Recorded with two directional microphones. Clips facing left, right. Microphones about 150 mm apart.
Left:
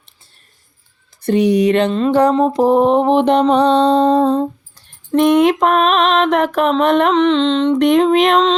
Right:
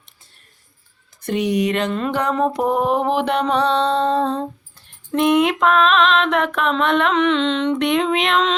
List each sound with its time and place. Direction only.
1.2 s mantra: 35° left (ahead or behind)